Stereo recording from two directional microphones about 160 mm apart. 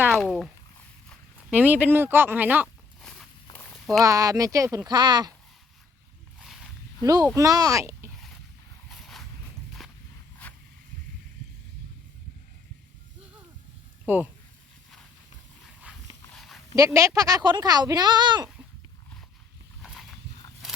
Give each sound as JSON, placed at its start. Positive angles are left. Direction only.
{"t": 0.1, "sound": "speech", "side_deg": 0}
{"t": 1.5, "sound": "speech", "side_deg": -10}
{"t": 3.0, "sound": "walk", "side_deg": 5}
{"t": 4.0, "sound": "speech", "side_deg": -20}
{"t": 7.0, "sound": "speech", "side_deg": -25}
{"t": 8.9, "sound": "a sound", "side_deg": 0}
{"t": 16.3, "sound": "dog", "side_deg": 0}
{"t": 16.7, "sound": "speech", "side_deg": -20}
{"t": 19.8, "sound": "a sound", "side_deg": 0}
{"t": 20.6, "sound": "walk", "side_deg": 0}